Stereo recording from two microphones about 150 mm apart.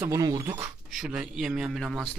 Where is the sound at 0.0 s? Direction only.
20° right (ahead or behind).